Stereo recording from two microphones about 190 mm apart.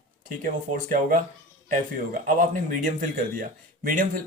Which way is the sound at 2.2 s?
45° right (ahead or behind).